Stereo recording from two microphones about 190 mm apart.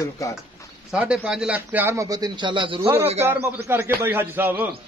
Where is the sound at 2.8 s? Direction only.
10° right (ahead or behind).